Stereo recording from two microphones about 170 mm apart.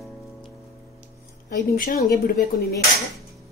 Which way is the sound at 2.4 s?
60° left (ahead or behind).